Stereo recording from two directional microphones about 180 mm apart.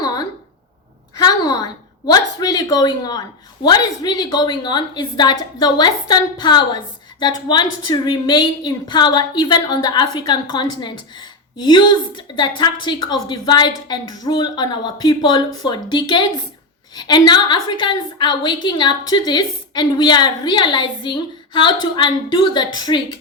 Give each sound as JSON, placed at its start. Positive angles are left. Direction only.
{"t": 1.2, "sound": "a woman's voice", "side_deg": 20}